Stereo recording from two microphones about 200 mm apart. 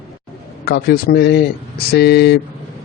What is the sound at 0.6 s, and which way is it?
A man's voice, 50° left (ahead or behind).